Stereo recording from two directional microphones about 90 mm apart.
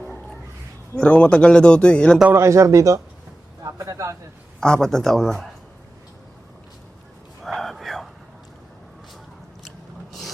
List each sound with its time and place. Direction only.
0.0 s cat: 15° left (ahead or behind)
0.9 s speech: 15° left (ahead or behind)
2.3 s a man's voice: 35° right (ahead or behind)
4.6 s speech: 5° left (ahead or behind)
7.4 s whispering: centre (ahead or behind)
9.6 s a sound: centre (ahead or behind)